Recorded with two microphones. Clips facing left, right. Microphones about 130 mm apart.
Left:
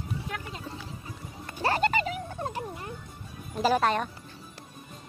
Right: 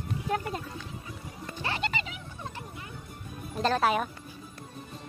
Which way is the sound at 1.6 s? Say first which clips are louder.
Left 8 dB; 45° left (ahead or behind).